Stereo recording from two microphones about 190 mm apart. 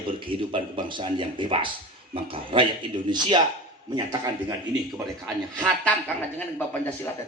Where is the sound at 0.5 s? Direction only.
25° right (ahead or behind).